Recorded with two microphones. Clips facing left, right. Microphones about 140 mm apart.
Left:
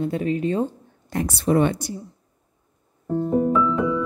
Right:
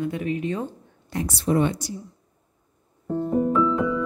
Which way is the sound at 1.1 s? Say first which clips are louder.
Left 3 dB; 60° left (ahead or behind).